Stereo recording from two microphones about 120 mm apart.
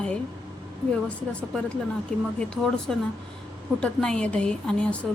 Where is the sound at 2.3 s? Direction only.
5° left (ahead or behind).